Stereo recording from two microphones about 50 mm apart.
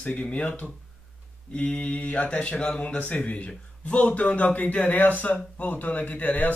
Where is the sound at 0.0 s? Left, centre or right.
Left.